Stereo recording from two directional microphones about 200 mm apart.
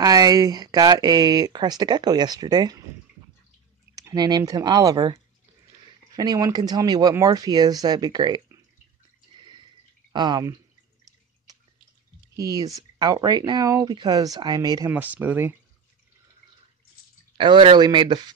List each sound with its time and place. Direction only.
0.0 s speech: 20° right (ahead or behind)
3.9 s speech: 15° right (ahead or behind)
9.4 s drip: 25° right (ahead or behind)
10.1 s speech: 20° right (ahead or behind)
12.4 s speech: 15° right (ahead or behind)
14.9 s speech: 10° right (ahead or behind)
17.4 s speech: 25° right (ahead or behind)